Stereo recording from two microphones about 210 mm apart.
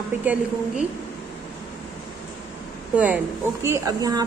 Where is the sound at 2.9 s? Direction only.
10° right (ahead or behind).